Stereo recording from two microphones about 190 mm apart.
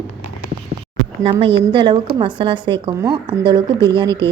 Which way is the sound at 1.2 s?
30° right (ahead or behind).